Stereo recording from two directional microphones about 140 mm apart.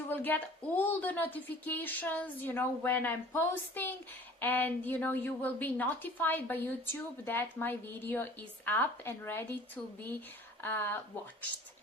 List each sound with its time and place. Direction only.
0.1 s speech: 15° left (ahead or behind)
10.6 s speech: 15° left (ahead or behind)